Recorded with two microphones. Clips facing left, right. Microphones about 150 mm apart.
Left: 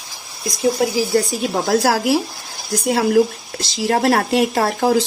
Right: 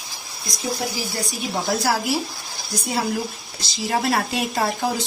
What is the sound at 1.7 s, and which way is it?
A woman's voice, 70° left (ahead or behind).